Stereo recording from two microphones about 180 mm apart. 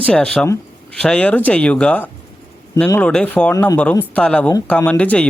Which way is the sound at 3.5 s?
15° left (ahead or behind).